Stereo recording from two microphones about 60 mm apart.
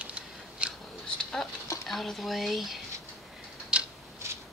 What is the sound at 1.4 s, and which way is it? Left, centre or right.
Speech, centre.